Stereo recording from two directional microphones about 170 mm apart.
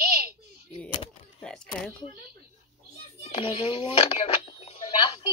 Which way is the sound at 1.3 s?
5° left (ahead or behind).